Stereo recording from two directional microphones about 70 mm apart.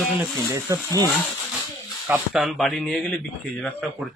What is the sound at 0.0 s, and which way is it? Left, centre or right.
Speech, centre.